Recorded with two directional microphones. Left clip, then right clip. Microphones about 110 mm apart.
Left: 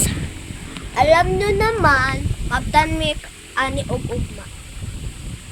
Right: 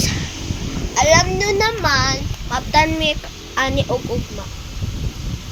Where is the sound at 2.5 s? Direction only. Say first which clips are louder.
Right 1 dB; 35° left (ahead or behind).